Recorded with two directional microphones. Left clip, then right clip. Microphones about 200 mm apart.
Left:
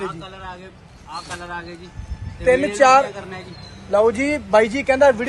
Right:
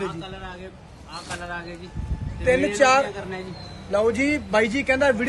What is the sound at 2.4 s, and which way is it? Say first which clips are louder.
Speech: left 4 dB; 30° left (ahead or behind).